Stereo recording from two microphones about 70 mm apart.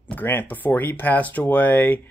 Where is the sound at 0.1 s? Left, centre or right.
Left.